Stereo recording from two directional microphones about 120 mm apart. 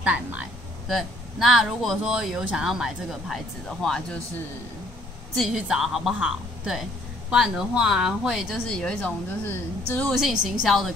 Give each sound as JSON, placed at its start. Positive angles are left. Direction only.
{"t": 0.0, "sound": "speech", "side_deg": -10}
{"t": 0.8, "sound": "speech", "side_deg": 0}
{"t": 5.3, "sound": "speech", "side_deg": 0}
{"t": 8.6, "sound": "speech", "side_deg": 10}
{"t": 10.1, "sound": "speech", "side_deg": -5}